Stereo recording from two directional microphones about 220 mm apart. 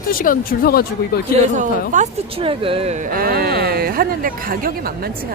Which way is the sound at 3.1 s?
40° right (ahead or behind).